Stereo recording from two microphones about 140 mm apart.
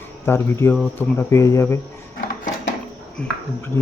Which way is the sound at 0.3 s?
15° left (ahead or behind).